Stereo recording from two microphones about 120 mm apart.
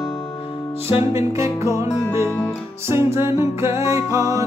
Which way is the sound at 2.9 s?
20° right (ahead or behind).